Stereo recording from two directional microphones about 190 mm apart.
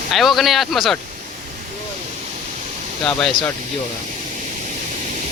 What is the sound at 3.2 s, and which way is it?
Speech, 5° left (ahead or behind).